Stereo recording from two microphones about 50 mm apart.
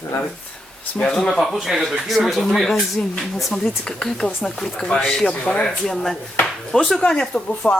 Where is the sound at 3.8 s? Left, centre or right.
Centre.